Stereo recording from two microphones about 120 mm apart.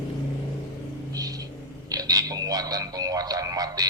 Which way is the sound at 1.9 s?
30° right (ahead or behind).